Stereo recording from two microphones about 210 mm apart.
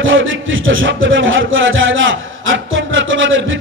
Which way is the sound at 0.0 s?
65° right (ahead or behind).